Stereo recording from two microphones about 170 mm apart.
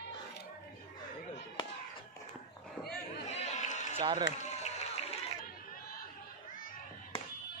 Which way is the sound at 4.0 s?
30° right (ahead or behind).